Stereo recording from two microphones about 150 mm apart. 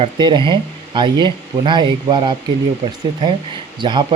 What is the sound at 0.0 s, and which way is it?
Speech, 30° right (ahead or behind).